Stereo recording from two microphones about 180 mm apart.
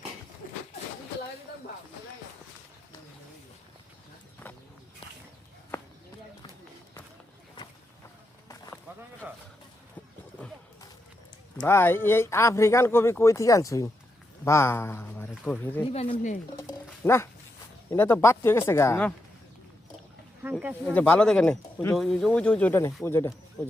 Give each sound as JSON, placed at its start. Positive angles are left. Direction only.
{"t": 4.4, "sound": "walk", "side_deg": 10}
{"t": 9.2, "sound": "a sound", "side_deg": -10}
{"t": 11.6, "sound": "speech", "side_deg": 10}
{"t": 15.9, "sound": "speech", "side_deg": 30}
{"t": 16.6, "sound": "a sound", "side_deg": 15}
{"t": 17.9, "sound": "speech", "side_deg": 10}
{"t": 20.4, "sound": "wild animals", "side_deg": -10}
{"t": 20.8, "sound": "speech", "side_deg": 10}